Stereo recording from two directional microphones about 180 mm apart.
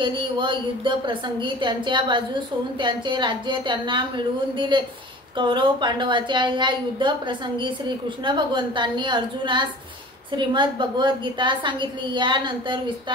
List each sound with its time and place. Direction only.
0.0 s a woman's voice: 25° right (ahead or behind)